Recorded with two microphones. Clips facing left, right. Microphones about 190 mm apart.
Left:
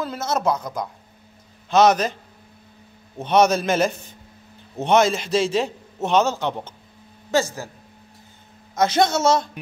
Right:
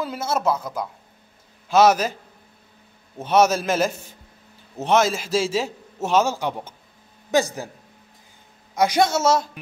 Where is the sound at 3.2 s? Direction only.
5° right (ahead or behind).